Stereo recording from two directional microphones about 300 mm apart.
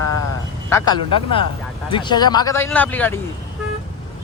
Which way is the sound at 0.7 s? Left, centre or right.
Centre.